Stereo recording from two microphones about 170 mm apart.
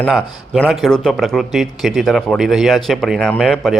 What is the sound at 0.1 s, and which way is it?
Speech, centre (ahead or behind).